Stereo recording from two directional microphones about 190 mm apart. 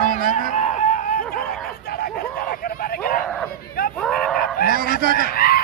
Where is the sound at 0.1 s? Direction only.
50° right (ahead or behind).